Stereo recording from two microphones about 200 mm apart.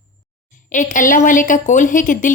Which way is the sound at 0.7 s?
40° left (ahead or behind).